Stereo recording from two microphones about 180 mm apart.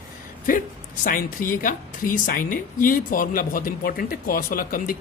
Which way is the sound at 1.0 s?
50° left (ahead or behind).